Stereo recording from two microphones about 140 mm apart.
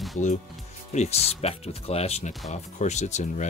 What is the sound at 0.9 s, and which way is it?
Speech, 50° left (ahead or behind).